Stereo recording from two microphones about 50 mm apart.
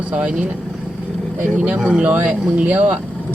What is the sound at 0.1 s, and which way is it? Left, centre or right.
Speech, right.